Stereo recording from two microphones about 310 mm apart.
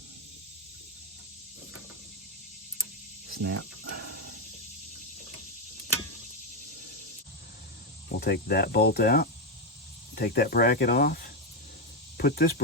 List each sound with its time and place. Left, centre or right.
3.3 s speech: right
8.2 s cricket: left
12.1 s speech: left